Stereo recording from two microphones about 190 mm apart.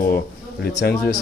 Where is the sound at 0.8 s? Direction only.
55° left (ahead or behind).